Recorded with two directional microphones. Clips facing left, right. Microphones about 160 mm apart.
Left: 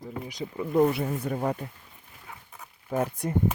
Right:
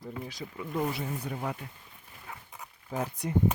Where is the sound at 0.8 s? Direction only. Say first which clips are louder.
Left 9 dB; 55° left (ahead or behind).